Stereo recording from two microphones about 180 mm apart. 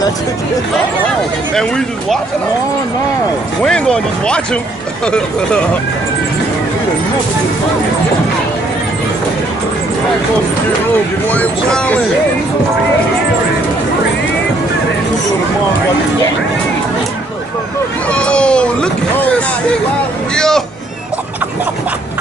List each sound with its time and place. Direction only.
1.5 s speech: 5° left (ahead or behind)
3.6 s speech: 5° left (ahead or behind)
11.2 s speech: 5° left (ahead or behind)
18.1 s cat: 5° left (ahead or behind)
20.3 s speech: 5° left (ahead or behind)